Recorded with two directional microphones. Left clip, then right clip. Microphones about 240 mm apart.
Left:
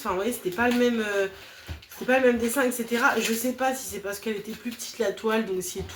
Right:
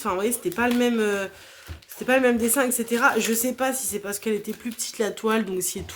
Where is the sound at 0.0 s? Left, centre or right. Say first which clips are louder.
Right 2 dB; right.